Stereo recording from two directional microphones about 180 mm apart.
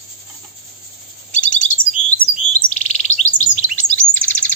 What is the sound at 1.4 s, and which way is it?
Chirp, 45° left (ahead or behind).